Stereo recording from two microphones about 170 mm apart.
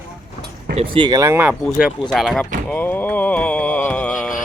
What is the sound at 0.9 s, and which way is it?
Speech, 25° right (ahead or behind).